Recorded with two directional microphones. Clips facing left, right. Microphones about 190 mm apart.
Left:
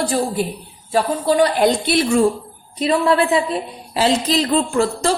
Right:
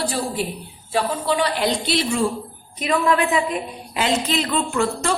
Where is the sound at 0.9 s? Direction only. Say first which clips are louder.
Left 5 dB; 40° left (ahead or behind).